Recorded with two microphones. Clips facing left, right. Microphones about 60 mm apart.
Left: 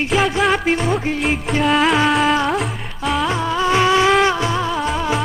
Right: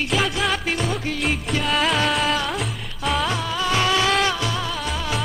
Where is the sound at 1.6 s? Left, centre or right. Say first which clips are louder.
Left 6 dB; centre.